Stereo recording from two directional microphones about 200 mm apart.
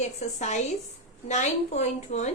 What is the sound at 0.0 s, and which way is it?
A woman's voice, 35° left (ahead or behind).